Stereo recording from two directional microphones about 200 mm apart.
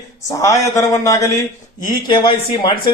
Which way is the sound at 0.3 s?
15° left (ahead or behind).